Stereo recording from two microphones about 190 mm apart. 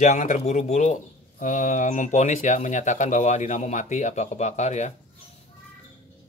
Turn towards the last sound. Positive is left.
turn(degrees=35)  # may be behind; listen again after turning